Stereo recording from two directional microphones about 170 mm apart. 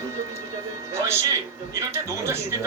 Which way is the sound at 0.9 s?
15° right (ahead or behind).